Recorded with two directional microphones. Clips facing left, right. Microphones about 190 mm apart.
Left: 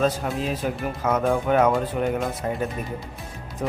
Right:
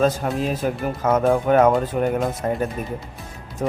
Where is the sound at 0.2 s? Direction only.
45° right (ahead or behind).